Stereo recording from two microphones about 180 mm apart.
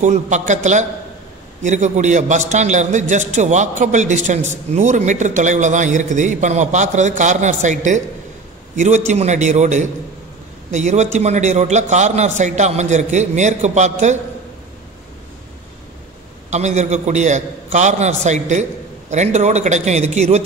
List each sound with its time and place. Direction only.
0.0 s a man's voice: 40° right (ahead or behind)
1.6 s a man's voice: 40° right (ahead or behind)
16.4 s a man's voice: 40° right (ahead or behind)